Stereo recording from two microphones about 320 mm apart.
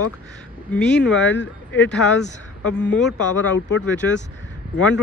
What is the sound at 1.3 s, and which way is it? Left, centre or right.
Speech, left.